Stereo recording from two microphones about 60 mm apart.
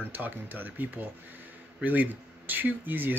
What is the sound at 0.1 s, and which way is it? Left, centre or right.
Speech, right.